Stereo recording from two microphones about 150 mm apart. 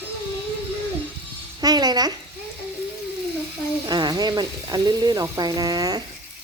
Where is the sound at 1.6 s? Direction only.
25° right (ahead or behind).